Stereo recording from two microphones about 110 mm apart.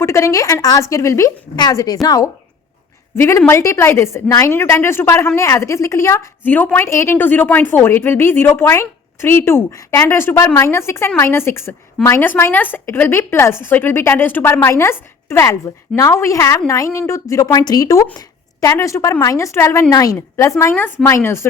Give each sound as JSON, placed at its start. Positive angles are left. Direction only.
{"t": 0.0, "sound": "a woman's voice", "side_deg": 25}
{"t": 3.2, "sound": "a woman's voice", "side_deg": 25}